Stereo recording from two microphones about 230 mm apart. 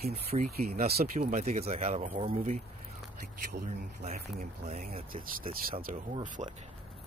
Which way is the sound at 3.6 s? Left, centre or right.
Right.